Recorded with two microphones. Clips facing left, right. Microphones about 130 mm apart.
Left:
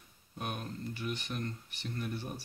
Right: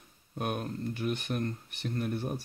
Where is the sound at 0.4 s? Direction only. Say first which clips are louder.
Right 6 dB; 55° right (ahead or behind).